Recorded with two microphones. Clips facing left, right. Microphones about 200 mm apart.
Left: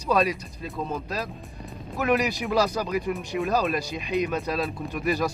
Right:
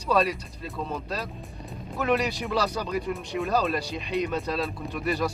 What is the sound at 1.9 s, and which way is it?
Speech, 10° left (ahead or behind).